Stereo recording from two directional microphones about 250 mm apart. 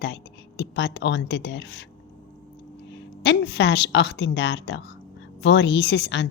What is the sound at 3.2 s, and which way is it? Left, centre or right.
A woman's voice, left.